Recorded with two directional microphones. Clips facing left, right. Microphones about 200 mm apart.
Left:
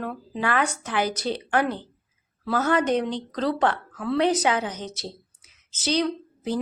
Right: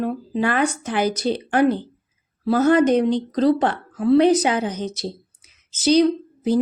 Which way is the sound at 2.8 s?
15° right (ahead or behind).